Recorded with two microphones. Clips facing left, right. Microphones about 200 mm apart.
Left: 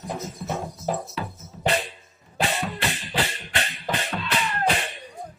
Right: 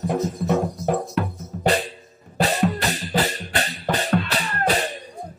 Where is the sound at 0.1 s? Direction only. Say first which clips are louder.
Right 8 dB; 60° right (ahead or behind).